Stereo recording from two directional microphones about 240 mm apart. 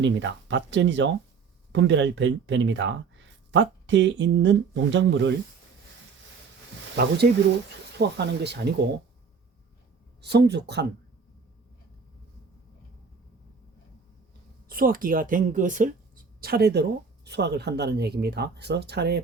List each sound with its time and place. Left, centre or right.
0.0 s speech: right
6.9 s speech: right
10.2 s speech: right
14.7 s speech: right